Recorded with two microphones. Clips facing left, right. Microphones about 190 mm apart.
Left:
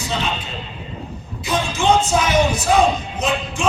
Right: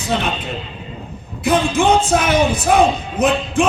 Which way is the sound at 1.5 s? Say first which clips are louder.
Right 4 dB; 55° right (ahead or behind).